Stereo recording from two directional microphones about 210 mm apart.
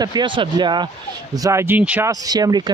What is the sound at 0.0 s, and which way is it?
Speech, 20° right (ahead or behind).